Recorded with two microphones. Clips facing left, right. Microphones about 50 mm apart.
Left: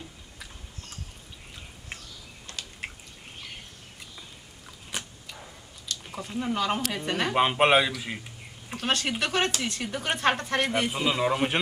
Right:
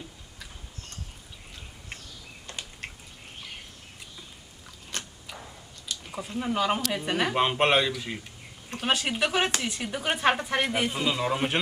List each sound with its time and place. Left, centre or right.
2.5 s drip: right
4.9 s a sound: centre
6.1 s speech: centre
7.3 s a man's voice: centre
8.7 s speech: centre